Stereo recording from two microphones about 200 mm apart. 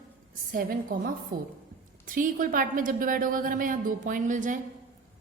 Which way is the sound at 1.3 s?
45° right (ahead or behind).